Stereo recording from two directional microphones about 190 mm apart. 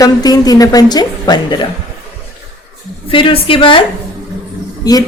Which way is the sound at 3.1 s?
25° left (ahead or behind).